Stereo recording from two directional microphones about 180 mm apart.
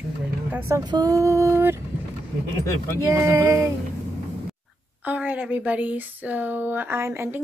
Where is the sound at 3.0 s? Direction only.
15° right (ahead or behind).